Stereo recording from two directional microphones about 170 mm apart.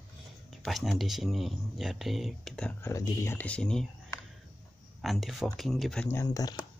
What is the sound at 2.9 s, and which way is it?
Speech, 20° left (ahead or behind).